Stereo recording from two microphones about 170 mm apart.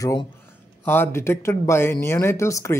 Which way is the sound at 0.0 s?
20° left (ahead or behind).